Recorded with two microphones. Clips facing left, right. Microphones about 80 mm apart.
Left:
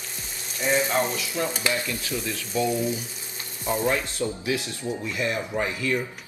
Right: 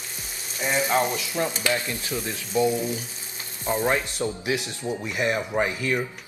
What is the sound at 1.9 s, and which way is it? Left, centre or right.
Stir, right.